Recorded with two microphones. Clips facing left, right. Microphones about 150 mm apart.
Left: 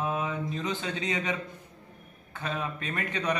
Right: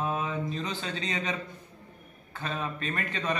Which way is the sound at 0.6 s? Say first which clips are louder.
Left 3 dB; 20° left (ahead or behind).